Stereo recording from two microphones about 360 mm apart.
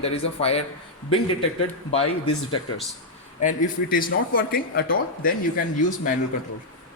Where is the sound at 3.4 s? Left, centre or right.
Left.